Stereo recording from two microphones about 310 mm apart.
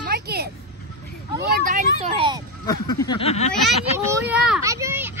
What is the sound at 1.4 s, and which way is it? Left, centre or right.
A child's voice, right.